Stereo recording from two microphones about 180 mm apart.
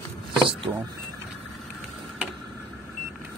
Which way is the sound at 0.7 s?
10° right (ahead or behind).